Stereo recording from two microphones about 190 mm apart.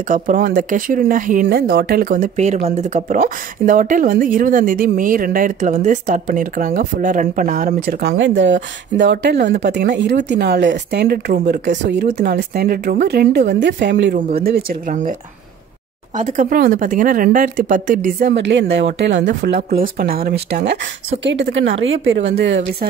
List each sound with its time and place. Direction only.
0.1 s speech: 45° right (ahead or behind); by 14.1 s 65° right (ahead or behind)
14.1 s speech: 55° right (ahead or behind)
16.2 s speech: 45° right (ahead or behind)
18.3 s speech: 65° right (ahead or behind); by 22.2 s 90° right
22.3 s speech: 65° right (ahead or behind)